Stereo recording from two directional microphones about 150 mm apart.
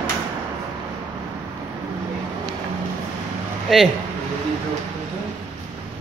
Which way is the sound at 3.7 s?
Centre (ahead or behind).